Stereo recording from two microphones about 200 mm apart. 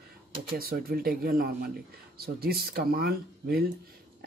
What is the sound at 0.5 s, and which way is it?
Speech, 50° right (ahead or behind).